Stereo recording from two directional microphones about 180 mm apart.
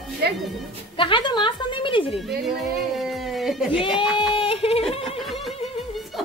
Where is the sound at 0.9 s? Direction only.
25° left (ahead or behind).